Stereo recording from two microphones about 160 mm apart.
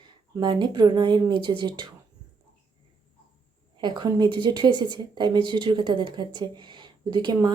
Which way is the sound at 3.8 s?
25° right (ahead or behind).